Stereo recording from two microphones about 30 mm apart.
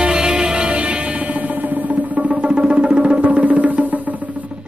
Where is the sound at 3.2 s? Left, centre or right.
Right.